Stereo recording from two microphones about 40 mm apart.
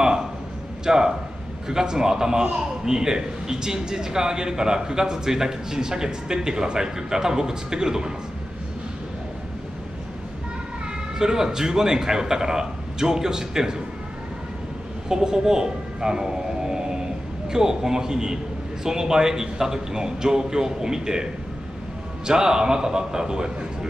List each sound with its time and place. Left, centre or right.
0.0 s a sound: centre
0.8 s a man's voice: centre
11.1 s a man's voice: centre
15.0 s a man's voice: centre